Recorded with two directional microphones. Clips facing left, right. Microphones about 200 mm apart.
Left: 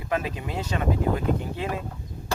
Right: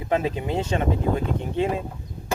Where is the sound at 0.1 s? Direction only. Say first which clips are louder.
Right 5 dB; 25° right (ahead or behind).